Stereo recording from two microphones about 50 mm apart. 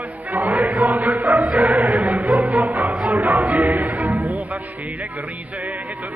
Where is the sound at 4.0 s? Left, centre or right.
Right.